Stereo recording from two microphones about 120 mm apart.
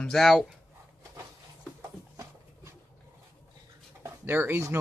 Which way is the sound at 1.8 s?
25° right (ahead or behind).